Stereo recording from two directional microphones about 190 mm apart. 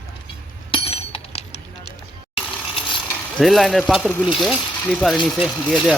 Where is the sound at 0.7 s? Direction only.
30° left (ahead or behind).